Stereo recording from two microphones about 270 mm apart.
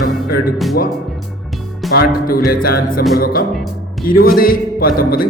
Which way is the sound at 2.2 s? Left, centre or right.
Left.